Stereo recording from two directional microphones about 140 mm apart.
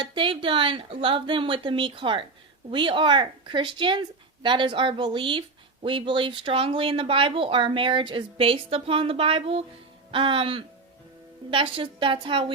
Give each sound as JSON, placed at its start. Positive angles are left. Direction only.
{"t": 0.0, "sound": "speech", "side_deg": -35}